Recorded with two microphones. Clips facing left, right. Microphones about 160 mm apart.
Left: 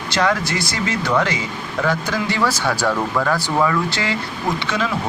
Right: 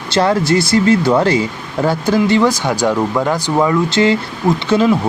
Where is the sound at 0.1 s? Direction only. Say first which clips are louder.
Right 7 dB; 30° right (ahead or behind).